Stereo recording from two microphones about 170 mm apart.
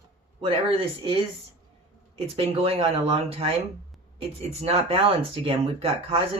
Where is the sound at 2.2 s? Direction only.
35° right (ahead or behind).